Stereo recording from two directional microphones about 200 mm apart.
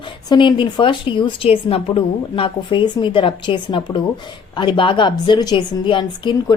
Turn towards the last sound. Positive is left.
turn(degrees=25)  # may be behind; listen again after turning